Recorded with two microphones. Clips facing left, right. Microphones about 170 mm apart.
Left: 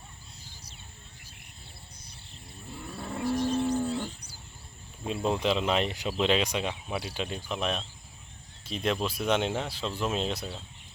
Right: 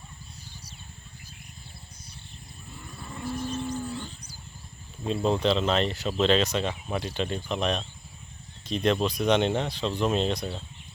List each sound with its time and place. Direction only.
3.0 s cattle: 75° left (ahead or behind)
5.0 s speech: 5° left (ahead or behind)